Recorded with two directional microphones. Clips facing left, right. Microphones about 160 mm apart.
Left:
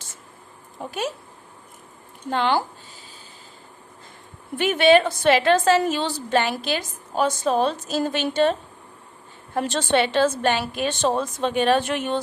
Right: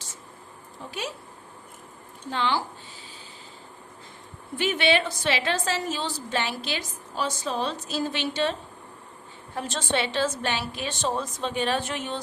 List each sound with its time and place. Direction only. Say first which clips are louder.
0.8 s a woman's voice: left 6 dB; 50° left (ahead or behind)
2.3 s a woman's voice: left 5 dB; 50° left (ahead or behind)
4.5 s a woman's voice: left 7 dB; 50° left (ahead or behind)
9.6 s a woman's voice: left 7 dB; 65° left (ahead or behind)